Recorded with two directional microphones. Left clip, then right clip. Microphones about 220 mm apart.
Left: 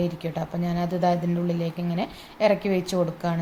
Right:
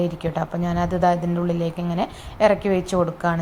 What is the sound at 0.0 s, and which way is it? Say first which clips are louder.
A woman's voice: right 5 dB; 10° right (ahead or behind).